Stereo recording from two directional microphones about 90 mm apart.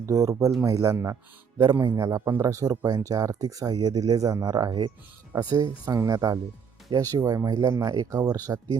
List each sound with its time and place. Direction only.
0.0 s speech: 40° right (ahead or behind)
5.8 s speech: 35° right (ahead or behind)